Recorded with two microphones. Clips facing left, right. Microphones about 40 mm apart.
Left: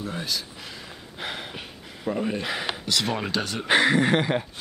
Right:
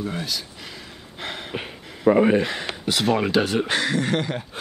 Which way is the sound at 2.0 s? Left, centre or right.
Right.